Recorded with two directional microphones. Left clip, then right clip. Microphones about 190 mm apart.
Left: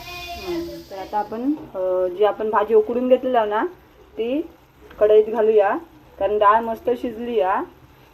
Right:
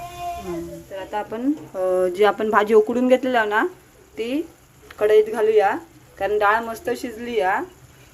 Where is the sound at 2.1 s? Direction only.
35° right (ahead or behind); by 7.6 s 10° right (ahead or behind).